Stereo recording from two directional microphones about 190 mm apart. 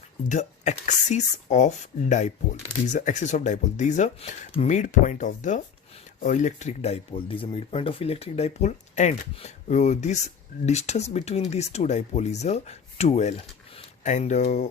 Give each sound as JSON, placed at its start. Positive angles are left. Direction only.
{"t": 0.3, "sound": "speech", "side_deg": 40}